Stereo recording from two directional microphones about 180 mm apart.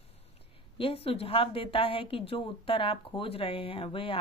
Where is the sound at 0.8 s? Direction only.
30° left (ahead or behind).